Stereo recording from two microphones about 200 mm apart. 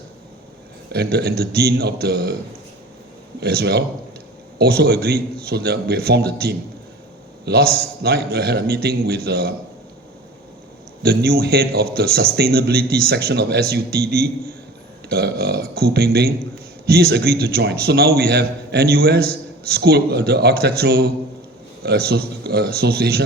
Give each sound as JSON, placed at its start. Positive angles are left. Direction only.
{"t": 0.9, "sound": "a man's voice", "side_deg": -50}
{"t": 3.4, "sound": "a man's voice", "side_deg": -55}
{"t": 11.0, "sound": "a man's voice", "side_deg": -50}